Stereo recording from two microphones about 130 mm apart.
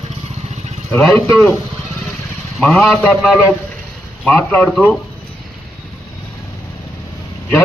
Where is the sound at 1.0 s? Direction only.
Centre (ahead or behind).